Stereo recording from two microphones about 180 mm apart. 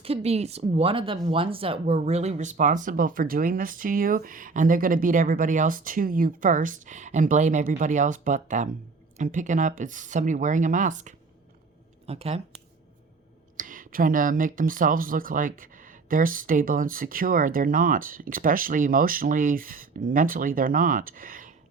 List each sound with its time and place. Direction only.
0.0 s speech: 35° right (ahead or behind)
13.6 s speech: 50° right (ahead or behind)